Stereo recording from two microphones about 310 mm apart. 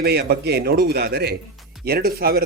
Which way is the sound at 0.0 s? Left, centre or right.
Right.